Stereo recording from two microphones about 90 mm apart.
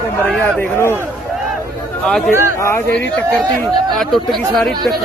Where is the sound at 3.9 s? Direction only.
Centre (ahead or behind).